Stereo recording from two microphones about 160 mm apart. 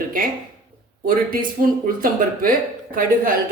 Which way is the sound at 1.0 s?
60° right (ahead or behind).